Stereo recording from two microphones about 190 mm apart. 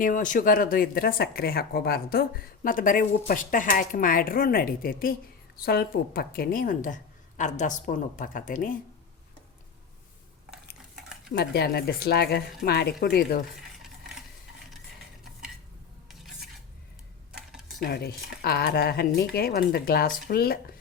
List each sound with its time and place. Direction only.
0.0 s a woman's voice: 45° left (ahead or behind)
11.3 s speech: 60° left (ahead or behind)
17.7 s a woman's voice: 55° left (ahead or behind)